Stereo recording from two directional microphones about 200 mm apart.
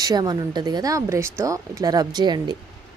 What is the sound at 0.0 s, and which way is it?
Speech, 20° right (ahead or behind).